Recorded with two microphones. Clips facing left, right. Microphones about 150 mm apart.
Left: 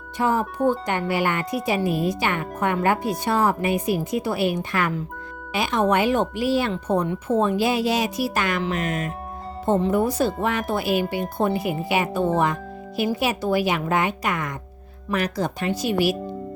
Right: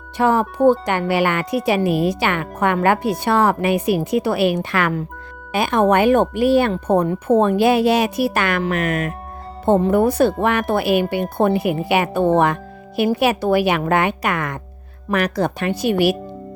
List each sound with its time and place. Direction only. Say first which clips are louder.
0.2 s speech: right 6 dB; 70° right (ahead or behind)
5.5 s speech: right 5 dB; 50° right (ahead or behind)